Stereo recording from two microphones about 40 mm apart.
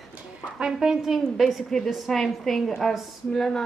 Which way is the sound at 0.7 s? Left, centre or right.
Centre.